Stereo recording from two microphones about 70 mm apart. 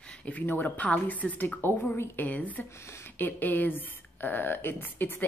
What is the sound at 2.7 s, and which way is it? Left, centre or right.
Speech, left.